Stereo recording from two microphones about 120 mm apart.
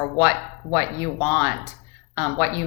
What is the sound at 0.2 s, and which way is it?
A woman's voice, 25° left (ahead or behind).